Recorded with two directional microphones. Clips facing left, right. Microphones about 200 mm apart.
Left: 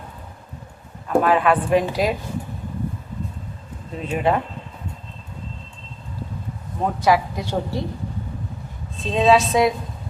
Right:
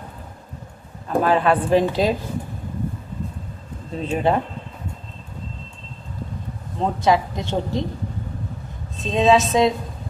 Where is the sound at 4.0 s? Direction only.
30° right (ahead or behind).